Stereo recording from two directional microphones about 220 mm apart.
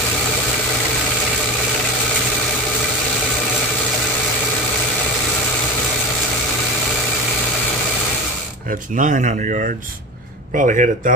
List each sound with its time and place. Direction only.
8.9 s speech: 35° right (ahead or behind)